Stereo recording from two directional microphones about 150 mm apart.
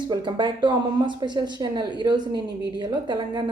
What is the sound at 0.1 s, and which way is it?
Speech, 30° right (ahead or behind).